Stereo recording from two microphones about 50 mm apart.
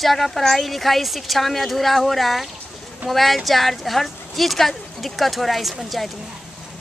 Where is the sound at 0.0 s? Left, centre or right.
Centre.